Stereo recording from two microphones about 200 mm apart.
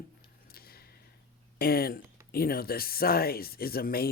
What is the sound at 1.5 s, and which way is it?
Speech, 50° left (ahead or behind).